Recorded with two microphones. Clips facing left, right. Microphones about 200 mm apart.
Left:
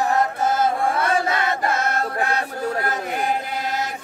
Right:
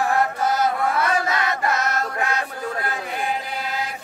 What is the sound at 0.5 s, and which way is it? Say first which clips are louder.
Chant: left 1 dB; 25° left (ahead or behind).